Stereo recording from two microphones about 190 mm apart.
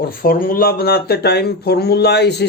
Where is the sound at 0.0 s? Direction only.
50° left (ahead or behind).